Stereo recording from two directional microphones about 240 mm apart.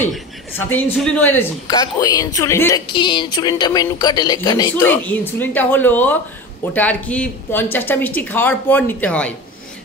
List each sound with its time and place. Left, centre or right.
0.0 s speech: centre